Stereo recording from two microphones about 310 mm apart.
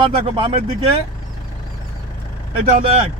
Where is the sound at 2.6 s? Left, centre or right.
Centre.